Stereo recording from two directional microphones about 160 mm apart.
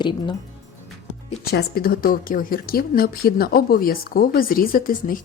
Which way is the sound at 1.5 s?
70° left (ahead or behind).